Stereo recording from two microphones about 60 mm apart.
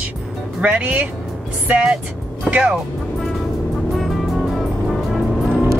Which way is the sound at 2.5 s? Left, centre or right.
Centre.